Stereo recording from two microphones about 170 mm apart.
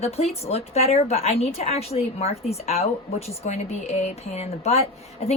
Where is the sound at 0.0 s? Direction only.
40° left (ahead or behind).